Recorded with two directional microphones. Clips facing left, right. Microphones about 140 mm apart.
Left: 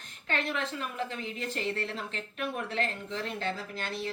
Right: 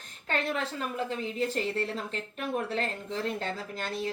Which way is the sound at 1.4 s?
40° right (ahead or behind).